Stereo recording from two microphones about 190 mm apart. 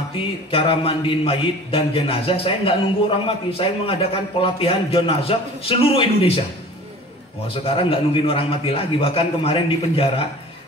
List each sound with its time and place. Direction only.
0.2 s a man's voice: 30° left (ahead or behind)
7.4 s a man's voice: 30° left (ahead or behind)